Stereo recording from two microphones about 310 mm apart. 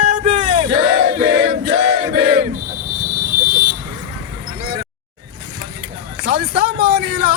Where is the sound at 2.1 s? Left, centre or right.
Right.